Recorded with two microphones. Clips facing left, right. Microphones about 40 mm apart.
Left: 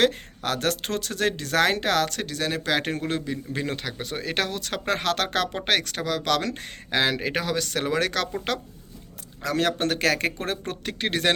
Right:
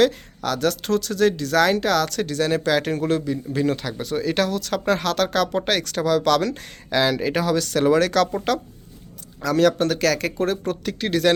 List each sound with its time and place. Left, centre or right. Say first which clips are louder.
0.0 s speech: right 3 dB; left
2.2 s speech: right 6 dB; centre
2.7 s speech: right 5 dB; left
9.4 s speech: right 6 dB; left